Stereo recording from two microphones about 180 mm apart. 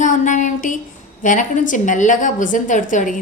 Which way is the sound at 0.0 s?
45° left (ahead or behind).